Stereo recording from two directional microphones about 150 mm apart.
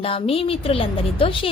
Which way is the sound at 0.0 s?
40° left (ahead or behind).